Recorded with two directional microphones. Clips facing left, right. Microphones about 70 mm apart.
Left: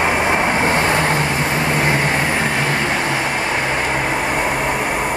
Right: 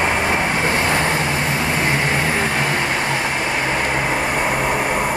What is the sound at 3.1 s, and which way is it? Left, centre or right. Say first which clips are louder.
Vehicle: left 1 dB; centre.